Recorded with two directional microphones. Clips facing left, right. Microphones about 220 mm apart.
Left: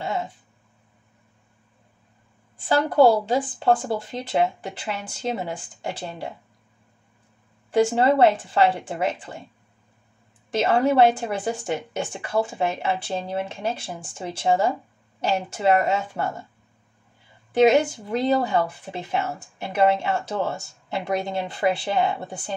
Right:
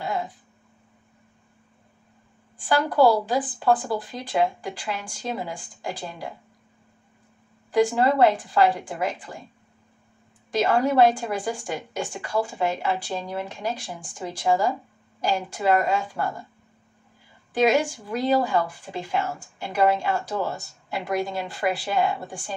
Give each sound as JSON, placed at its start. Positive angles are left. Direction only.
{"t": 0.0, "sound": "a sound", "side_deg": 25}
{"t": 2.7, "sound": "speech", "side_deg": 25}
{"t": 7.7, "sound": "speech", "side_deg": 25}
{"t": 10.5, "sound": "speech", "side_deg": 25}
{"t": 17.5, "sound": "speech", "side_deg": 25}